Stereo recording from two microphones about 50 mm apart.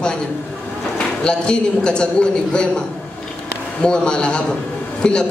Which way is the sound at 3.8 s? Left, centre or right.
Centre.